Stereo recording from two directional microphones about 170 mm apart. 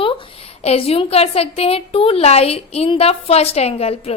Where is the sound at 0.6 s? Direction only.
35° left (ahead or behind).